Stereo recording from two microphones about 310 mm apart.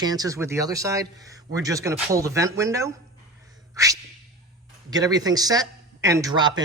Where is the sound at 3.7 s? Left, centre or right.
Centre.